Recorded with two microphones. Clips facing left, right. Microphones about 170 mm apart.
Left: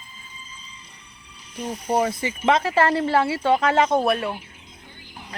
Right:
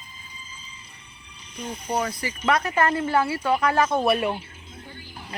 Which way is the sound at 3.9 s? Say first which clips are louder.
Left 1 dB; centre (ahead or behind).